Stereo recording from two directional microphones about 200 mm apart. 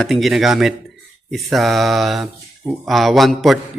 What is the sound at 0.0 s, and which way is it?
Speech, centre (ahead or behind).